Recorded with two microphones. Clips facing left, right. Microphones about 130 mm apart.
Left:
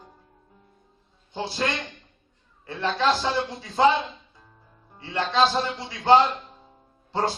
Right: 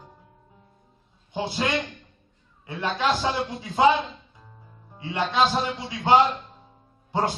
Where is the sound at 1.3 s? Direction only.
15° right (ahead or behind).